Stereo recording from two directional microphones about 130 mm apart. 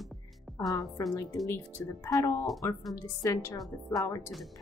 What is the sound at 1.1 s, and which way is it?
Speech, 20° left (ahead or behind).